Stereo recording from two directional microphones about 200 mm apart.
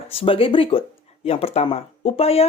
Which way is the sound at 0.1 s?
25° left (ahead or behind).